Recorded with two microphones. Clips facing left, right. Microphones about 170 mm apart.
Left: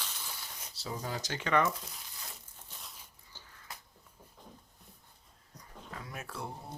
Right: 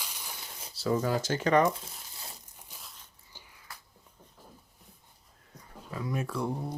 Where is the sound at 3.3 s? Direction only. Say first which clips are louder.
Right 1 dB; 15° right (ahead or behind).